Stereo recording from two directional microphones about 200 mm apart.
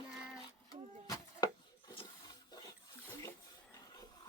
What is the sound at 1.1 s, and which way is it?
Rub, 20° left (ahead or behind).